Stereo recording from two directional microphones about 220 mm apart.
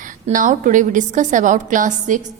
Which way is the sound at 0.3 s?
35° right (ahead or behind).